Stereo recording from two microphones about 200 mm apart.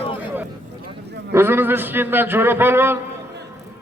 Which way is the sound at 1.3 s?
10° right (ahead or behind).